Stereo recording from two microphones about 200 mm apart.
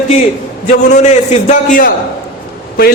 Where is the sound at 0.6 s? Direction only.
35° left (ahead or behind).